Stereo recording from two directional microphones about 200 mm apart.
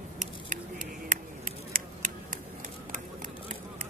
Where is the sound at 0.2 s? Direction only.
40° right (ahead or behind).